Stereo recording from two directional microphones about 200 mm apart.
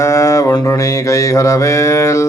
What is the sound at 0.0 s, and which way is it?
Mantra, 15° left (ahead or behind).